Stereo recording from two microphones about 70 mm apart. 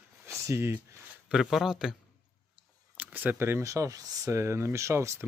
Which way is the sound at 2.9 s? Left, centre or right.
Right.